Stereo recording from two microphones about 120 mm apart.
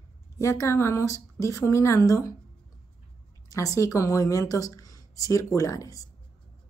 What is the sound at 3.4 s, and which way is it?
A woman's voice, 30° left (ahead or behind).